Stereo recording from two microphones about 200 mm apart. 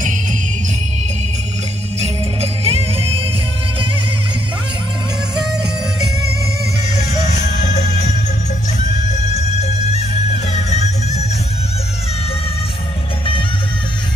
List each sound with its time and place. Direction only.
2.0 s music: 30° right (ahead or behind)
5.3 s music: 20° right (ahead or behind)
7.6 s music: 35° left (ahead or behind)
9.6 s music: 35° left (ahead or behind)